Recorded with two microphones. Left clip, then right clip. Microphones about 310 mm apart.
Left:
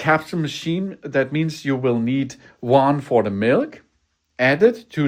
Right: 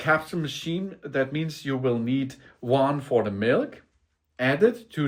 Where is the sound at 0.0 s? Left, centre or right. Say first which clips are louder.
Left 5 dB; left.